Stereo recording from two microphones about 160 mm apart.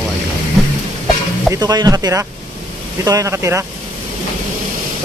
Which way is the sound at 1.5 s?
25° right (ahead or behind).